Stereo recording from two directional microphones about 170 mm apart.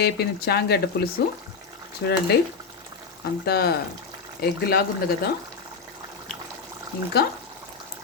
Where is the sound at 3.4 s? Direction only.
70° left (ahead or behind).